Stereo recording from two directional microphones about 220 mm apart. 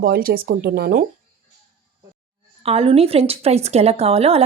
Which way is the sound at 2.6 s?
25° right (ahead or behind).